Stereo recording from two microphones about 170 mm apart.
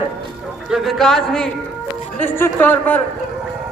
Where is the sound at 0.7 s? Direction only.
Centre (ahead or behind).